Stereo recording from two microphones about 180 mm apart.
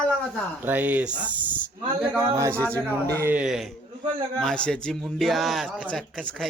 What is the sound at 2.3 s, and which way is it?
Speech, 15° right (ahead or behind).